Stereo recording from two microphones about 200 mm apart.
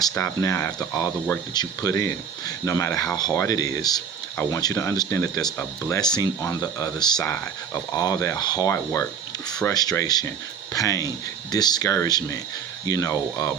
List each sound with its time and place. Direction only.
0.0 s speech: 15° left (ahead or behind)